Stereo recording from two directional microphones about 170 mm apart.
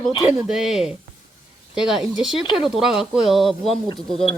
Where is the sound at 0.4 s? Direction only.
Centre (ahead or behind).